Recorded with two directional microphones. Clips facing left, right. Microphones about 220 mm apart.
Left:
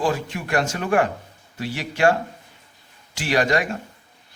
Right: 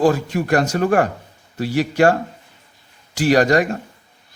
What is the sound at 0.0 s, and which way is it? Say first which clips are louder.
A man's voice: right 7 dB; 40° right (ahead or behind).